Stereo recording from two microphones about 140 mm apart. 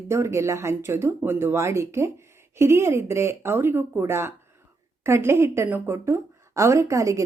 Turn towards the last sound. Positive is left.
turn(degrees=-25)  # may be behind; listen again after turning